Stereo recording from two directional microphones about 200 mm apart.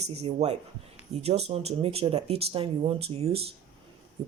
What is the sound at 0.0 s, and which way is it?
Speech, 30° right (ahead or behind).